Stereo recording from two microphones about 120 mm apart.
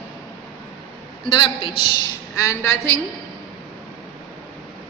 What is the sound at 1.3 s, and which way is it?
Speech, 45° left (ahead or behind).